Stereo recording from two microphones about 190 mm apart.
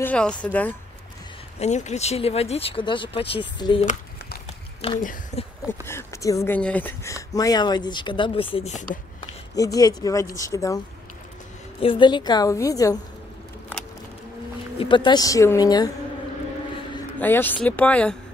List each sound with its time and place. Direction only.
0.0 s speech: 5° left (ahead or behind)
1.6 s speech: 35° left (ahead or behind)
4.8 s speech: 30° left (ahead or behind)
5.9 s speech: 15° left (ahead or behind); by 9.3 s 30° left (ahead or behind)
9.6 s speech: 20° left (ahead or behind)
11.8 s speech: 25° left (ahead or behind)
14.8 s speech: 25° left (ahead or behind)
17.2 s speech: 10° left (ahead or behind)